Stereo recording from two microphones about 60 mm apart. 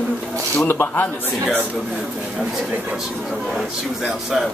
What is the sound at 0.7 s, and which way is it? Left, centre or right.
Speech, left.